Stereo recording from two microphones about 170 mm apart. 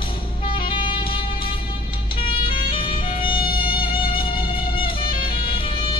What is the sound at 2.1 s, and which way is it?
Vehicle, 30° left (ahead or behind).